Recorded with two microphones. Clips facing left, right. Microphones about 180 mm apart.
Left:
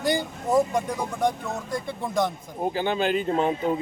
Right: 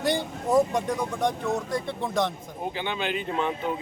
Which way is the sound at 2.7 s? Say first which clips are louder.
Left 6 dB; 45° left (ahead or behind).